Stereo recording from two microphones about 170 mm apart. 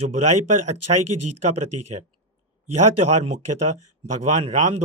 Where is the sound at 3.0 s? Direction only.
40° right (ahead or behind).